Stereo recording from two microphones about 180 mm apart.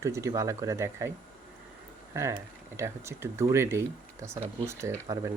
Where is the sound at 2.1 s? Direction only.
15° right (ahead or behind).